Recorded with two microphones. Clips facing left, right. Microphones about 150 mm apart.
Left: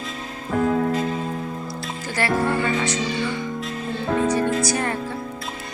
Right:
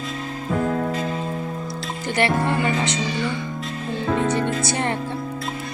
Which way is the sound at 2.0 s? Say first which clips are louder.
Right 1 dB; 25° right (ahead or behind).